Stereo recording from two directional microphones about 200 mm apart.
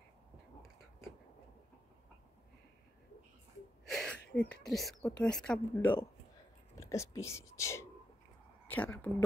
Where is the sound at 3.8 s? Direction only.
5° left (ahead or behind).